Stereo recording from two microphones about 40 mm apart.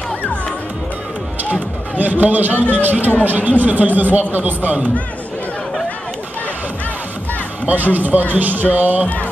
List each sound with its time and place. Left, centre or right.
1.4 s a sound: right
2.7 s speech: right
7.6 s speech: right
9.0 s mantra: left